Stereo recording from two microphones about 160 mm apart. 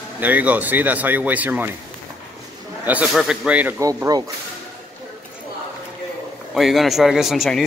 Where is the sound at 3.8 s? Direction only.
20° right (ahead or behind).